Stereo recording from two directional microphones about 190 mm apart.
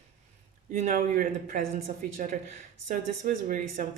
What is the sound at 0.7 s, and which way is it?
Speech, 45° right (ahead or behind).